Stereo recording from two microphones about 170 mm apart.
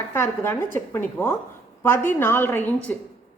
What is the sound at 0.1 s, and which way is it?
A woman's voice, 15° left (ahead or behind).